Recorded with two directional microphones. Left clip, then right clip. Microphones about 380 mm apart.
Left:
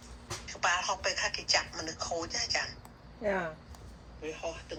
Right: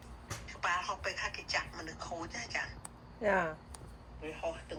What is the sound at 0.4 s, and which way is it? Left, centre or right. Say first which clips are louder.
Speech: left 4 dB; centre.